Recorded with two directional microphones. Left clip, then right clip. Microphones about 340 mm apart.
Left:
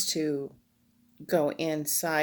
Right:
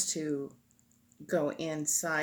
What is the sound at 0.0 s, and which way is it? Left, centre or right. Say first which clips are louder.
A woman's voice: left 5 dB; left.